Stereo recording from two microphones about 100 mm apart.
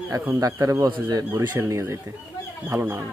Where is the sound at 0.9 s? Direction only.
50° right (ahead or behind).